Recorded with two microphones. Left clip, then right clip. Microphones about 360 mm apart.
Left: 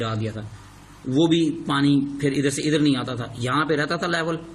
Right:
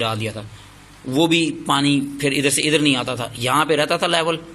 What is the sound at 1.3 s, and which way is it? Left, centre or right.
A man's voice, centre.